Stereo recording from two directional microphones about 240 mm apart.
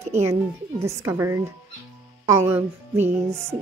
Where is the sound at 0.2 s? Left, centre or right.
Centre.